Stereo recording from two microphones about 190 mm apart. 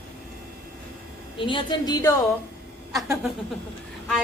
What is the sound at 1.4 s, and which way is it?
Speech, 25° left (ahead or behind).